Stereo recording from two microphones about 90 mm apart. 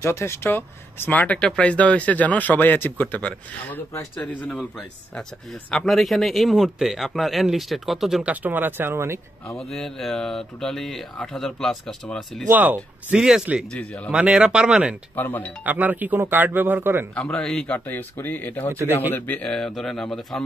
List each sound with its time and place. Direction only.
0.0 s speech: 30° left (ahead or behind)
5.7 s speech: 5° left (ahead or behind)
8.2 s speech: 15° right (ahead or behind)
9.6 s speech: 5° left (ahead or behind)
12.4 s speech: 20° right (ahead or behind)
13.7 s speech: 10° left (ahead or behind)
14.1 s speech: 10° right (ahead or behind)
15.1 s speech: 20° left (ahead or behind)
15.6 s speech: 20° right (ahead or behind)
17.1 s speech: 10° left (ahead or behind)
17.7 s speech: 25° left (ahead or behind); by 20.4 s 5° left (ahead or behind)